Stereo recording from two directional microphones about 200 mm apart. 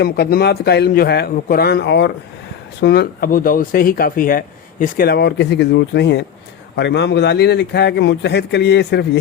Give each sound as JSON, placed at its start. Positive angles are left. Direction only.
{"t": 0.0, "sound": "a man's voice", "side_deg": 50}